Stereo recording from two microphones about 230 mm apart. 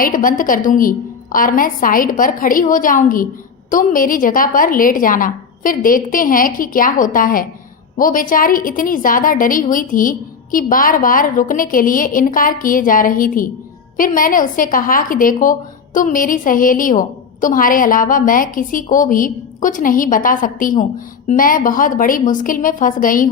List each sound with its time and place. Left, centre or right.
0.0 s a woman's voice: left